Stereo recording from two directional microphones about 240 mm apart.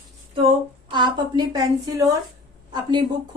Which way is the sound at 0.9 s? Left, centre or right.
Centre.